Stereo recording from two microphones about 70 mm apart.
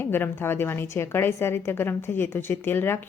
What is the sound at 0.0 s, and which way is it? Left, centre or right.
A woman's voice, left.